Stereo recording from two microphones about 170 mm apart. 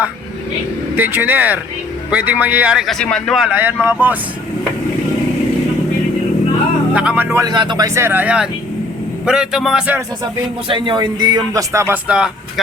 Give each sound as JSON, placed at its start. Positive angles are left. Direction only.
{"t": 0.9, "sound": "a man's voice", "side_deg": -10}
{"t": 6.9, "sound": "a man's voice", "side_deg": -5}
{"t": 7.4, "sound": "a man's voice", "side_deg": -25}
{"t": 10.7, "sound": "speech", "side_deg": -30}
{"t": 12.0, "sound": "speech", "side_deg": -5}